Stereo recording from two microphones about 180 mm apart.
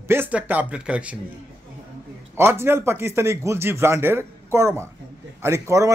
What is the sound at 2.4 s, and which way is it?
Speech, 15° right (ahead or behind).